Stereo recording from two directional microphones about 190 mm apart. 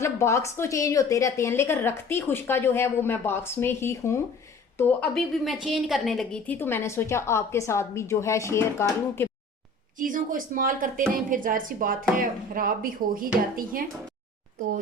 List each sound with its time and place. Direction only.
0.0 s a woman's voice: 15° left (ahead or behind)
10.0 s speech: 45° right (ahead or behind)